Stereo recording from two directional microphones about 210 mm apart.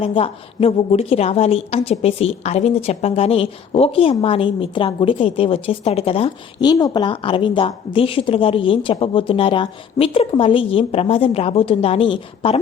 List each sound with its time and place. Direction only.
0.0 s a woman's voice: 25° left (ahead or behind)